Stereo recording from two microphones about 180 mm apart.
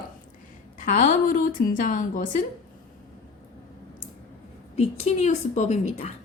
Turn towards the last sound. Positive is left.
turn(degrees=40)  # may be behind; listen again after turning